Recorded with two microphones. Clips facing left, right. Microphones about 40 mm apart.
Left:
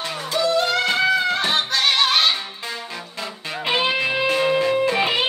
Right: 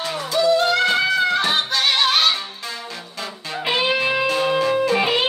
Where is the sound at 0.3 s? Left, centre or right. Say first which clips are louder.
Right 4 dB; left.